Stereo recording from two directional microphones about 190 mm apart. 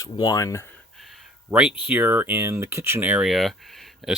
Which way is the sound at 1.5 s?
10° right (ahead or behind).